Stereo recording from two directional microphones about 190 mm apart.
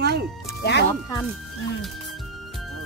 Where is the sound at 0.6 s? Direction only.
60° left (ahead or behind).